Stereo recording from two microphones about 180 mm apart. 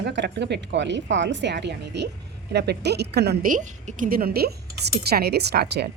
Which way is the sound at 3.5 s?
40° right (ahead or behind).